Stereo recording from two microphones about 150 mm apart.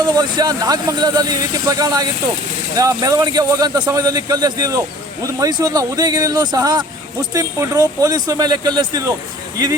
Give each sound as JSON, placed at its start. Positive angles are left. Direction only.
{"t": 0.0, "sound": "speech", "side_deg": -25}